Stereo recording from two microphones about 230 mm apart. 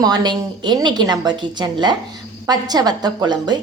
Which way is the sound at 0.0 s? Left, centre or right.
Centre.